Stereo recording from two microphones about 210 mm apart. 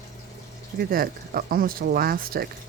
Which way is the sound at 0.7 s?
45° right (ahead or behind).